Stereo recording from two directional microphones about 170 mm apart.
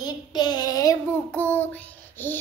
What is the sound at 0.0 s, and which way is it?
Child singing, 25° left (ahead or behind).